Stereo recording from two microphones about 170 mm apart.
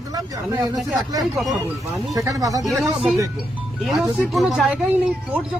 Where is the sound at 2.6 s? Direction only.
Centre (ahead or behind).